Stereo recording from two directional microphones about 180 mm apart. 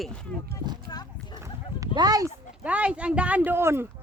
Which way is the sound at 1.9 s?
20° right (ahead or behind).